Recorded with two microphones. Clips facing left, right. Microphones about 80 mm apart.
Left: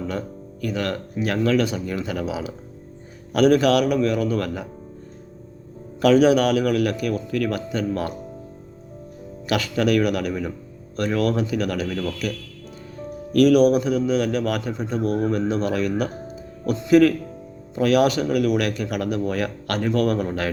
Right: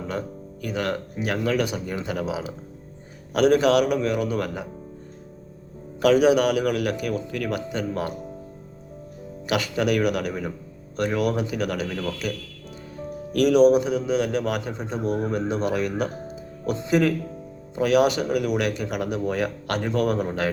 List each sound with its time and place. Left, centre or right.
0.6 s a man's voice: right
6.0 s a man's voice: centre
9.5 s a man's voice: centre
13.3 s a man's voice: right